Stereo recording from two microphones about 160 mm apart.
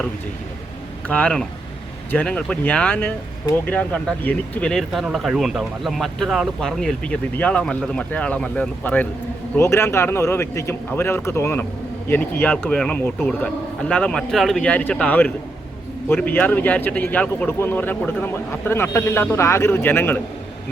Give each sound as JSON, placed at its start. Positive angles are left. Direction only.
{"t": 1.0, "sound": "speech", "side_deg": 10}